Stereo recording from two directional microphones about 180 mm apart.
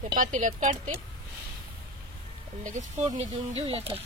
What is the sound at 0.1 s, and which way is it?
Speech, 45° right (ahead or behind).